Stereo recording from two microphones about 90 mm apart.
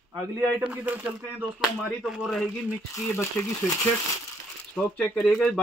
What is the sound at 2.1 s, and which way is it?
Speech, 5° right (ahead or behind).